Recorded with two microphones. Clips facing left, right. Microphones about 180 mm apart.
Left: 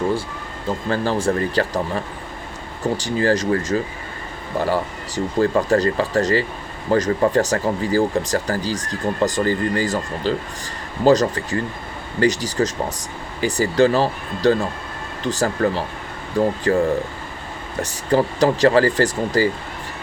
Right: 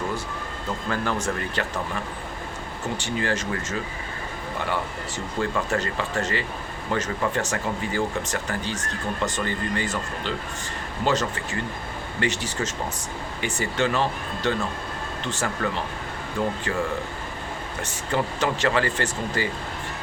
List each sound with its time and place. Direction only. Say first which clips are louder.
0.9 s speech: left 7 dB; 30° left (ahead or behind)
3.0 s speech: left 8 dB; 35° left (ahead or behind)
17.8 s speech: left 8 dB; 35° left (ahead or behind)